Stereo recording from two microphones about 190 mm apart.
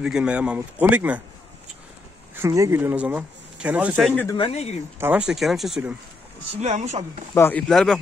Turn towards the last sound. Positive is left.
turn(degrees=0)  # may be behind; listen again after turning